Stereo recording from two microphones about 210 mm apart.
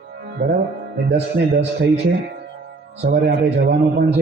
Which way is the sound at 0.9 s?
55° right (ahead or behind).